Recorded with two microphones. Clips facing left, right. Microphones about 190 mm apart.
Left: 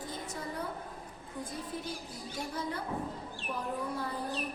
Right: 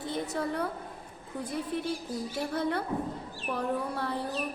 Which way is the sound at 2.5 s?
65° right (ahead or behind).